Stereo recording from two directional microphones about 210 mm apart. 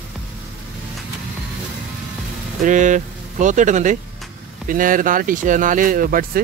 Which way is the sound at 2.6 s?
35° right (ahead or behind).